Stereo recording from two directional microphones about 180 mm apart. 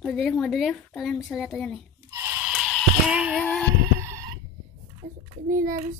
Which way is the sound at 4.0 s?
15° right (ahead or behind).